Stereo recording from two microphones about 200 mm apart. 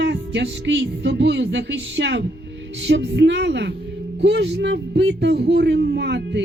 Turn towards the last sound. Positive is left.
turn(degrees=-60)  # may be behind; listen again after turning